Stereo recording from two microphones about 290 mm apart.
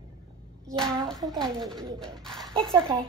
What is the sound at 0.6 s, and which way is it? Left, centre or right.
Speech, centre.